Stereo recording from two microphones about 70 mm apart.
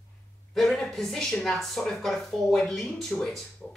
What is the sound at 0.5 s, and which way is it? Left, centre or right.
Speech, centre.